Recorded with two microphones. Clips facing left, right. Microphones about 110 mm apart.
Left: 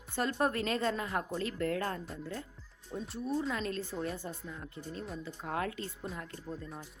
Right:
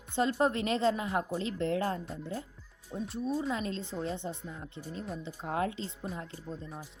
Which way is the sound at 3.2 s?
15° right (ahead or behind).